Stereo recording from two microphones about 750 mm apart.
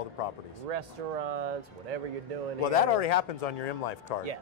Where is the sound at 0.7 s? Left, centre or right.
Right.